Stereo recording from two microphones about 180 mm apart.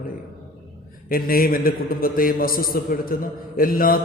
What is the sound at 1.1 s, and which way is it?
Speech, 55° left (ahead or behind).